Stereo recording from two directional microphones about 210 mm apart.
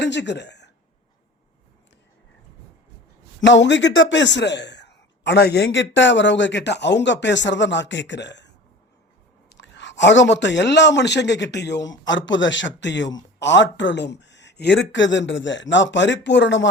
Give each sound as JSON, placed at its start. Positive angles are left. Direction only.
{"t": 0.0, "sound": "a woman's voice", "side_deg": 55}
{"t": 3.4, "sound": "a man's voice", "side_deg": 55}
{"t": 9.5, "sound": "chewing", "side_deg": 60}
{"t": 10.0, "sound": "a man's voice", "side_deg": 60}